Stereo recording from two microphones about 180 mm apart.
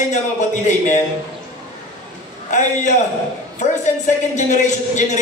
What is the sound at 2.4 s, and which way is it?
A man's voice, 45° left (ahead or behind).